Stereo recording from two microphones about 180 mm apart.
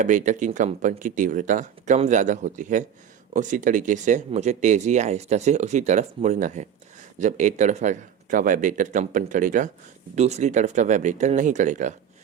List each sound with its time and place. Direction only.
0.0 s speech: 45° right (ahead or behind)